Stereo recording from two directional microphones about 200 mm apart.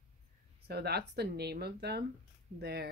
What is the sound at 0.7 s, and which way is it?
Speech, 50° right (ahead or behind).